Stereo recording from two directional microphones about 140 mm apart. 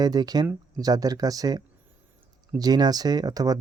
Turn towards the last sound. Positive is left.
turn(degrees=-25)  # may be behind; listen again after turning